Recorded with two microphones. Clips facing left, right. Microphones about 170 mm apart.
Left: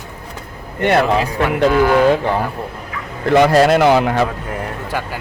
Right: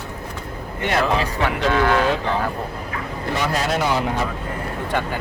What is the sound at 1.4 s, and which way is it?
Speech, 10° left (ahead or behind).